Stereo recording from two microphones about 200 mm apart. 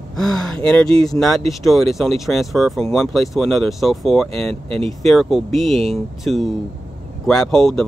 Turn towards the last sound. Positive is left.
turn(degrees=0)  # may be behind; listen again after turning